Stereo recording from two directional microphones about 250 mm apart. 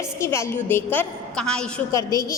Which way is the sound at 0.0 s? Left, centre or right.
Centre.